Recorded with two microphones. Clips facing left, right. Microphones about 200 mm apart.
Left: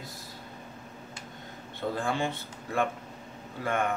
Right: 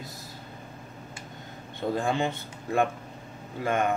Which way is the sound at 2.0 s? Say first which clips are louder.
Right 3 dB; 20° right (ahead or behind).